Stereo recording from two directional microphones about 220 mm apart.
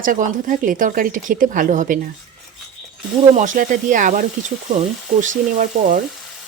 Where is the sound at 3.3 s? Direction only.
35° right (ahead or behind).